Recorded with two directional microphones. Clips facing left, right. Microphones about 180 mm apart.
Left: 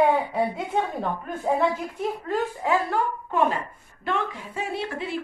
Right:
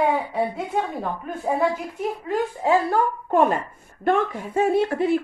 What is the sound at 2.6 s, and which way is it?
A woman's voice, 40° right (ahead or behind).